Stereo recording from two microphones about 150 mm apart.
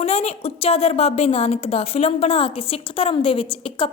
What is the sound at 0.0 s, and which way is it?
A woman's voice, 45° left (ahead or behind).